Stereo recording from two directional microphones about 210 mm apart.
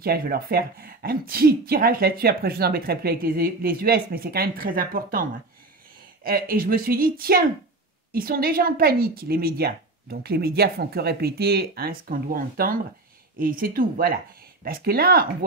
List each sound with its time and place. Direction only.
0.0 s speech: 45° right (ahead or behind)